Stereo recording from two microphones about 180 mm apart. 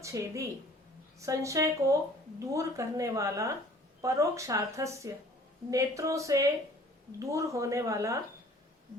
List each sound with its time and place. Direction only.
0.0 s a woman's voice: 15° right (ahead or behind)